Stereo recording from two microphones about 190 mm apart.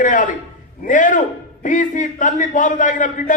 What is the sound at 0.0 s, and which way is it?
A man's voice, 45° left (ahead or behind).